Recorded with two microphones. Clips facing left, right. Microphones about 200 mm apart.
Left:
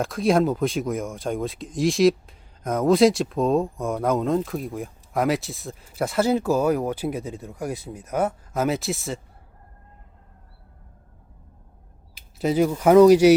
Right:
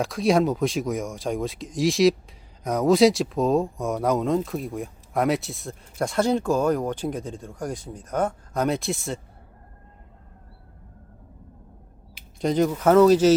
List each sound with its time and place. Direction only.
0.0 s speech: centre (ahead or behind)
12.4 s speech: 5° left (ahead or behind)